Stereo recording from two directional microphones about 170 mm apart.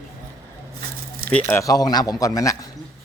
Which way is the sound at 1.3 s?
15° left (ahead or behind).